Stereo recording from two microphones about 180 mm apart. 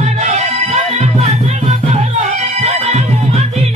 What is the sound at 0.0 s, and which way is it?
Music, 40° right (ahead or behind).